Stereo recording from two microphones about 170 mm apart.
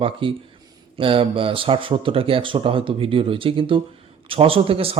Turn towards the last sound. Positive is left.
turn(degrees=-35)  # may be behind; listen again after turning